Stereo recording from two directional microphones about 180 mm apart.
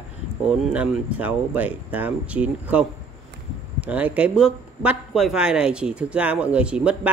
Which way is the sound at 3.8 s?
10° right (ahead or behind).